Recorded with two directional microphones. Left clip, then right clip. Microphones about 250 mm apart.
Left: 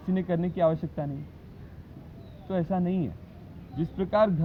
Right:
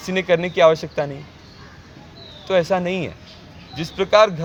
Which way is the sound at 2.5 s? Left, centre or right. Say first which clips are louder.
Right 12 dB; right.